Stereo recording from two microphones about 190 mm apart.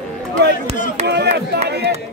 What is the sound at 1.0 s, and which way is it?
Speech, 60° right (ahead or behind).